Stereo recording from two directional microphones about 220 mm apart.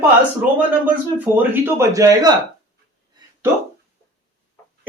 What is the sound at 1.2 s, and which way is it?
A man's voice, 10° right (ahead or behind).